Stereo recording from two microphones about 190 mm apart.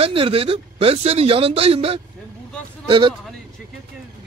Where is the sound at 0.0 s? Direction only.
30° right (ahead or behind).